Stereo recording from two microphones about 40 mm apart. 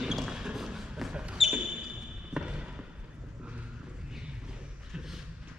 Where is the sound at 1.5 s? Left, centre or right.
Right.